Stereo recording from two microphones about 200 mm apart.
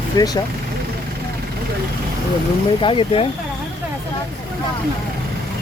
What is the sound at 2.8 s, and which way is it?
Speech, 25° left (ahead or behind).